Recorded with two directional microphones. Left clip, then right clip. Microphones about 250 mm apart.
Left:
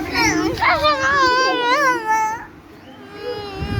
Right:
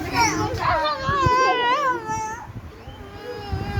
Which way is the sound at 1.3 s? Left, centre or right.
Centre.